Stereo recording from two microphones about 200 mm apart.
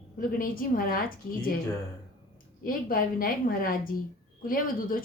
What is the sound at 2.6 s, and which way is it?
A woman's voice, 45° left (ahead or behind).